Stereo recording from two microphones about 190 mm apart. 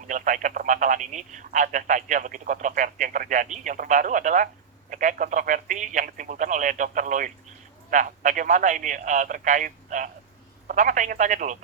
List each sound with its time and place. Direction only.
0.1 s speech: 40° right (ahead or behind)